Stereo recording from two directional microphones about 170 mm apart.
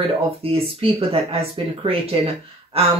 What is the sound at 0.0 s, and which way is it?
Speech, 35° right (ahead or behind).